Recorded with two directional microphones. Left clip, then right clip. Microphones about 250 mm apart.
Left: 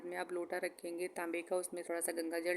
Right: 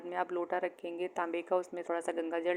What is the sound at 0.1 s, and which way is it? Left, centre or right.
Speech, centre.